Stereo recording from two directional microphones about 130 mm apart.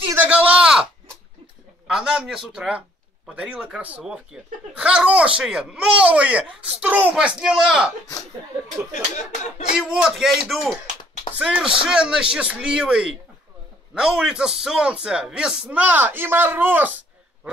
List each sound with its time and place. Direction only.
0.1 s a sound: 10° right (ahead or behind)
1.9 s a man's voice: 5° right (ahead or behind)
8.9 s speech: 65° left (ahead or behind)
9.8 s a man's voice: 5° right (ahead or behind)